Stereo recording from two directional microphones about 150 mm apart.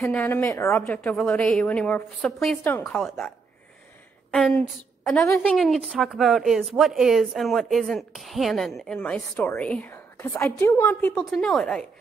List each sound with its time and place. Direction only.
0.0 s a woman's voice: 10° left (ahead or behind)
5.2 s a woman's voice: 15° left (ahead or behind)
5.6 s a woman's voice: centre (ahead or behind)